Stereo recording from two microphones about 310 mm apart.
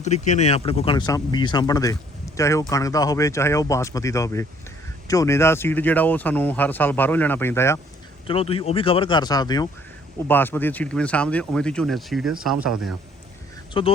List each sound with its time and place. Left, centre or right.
0.0 s speech: left; by 12.7 s centre
13.7 s speech: centre